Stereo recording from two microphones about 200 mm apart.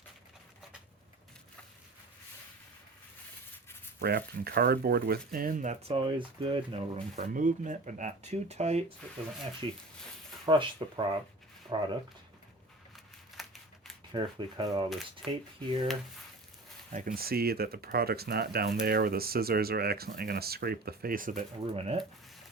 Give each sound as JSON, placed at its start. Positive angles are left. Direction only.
{"t": 4.0, "sound": "speech", "side_deg": -50}
{"t": 13.3, "sound": "crumpling", "side_deg": 0}
{"t": 14.1, "sound": "speech", "side_deg": -25}
{"t": 15.2, "sound": "speech", "side_deg": 0}
{"t": 16.9, "sound": "speech", "side_deg": -45}
{"t": 21.7, "sound": "speech", "side_deg": -30}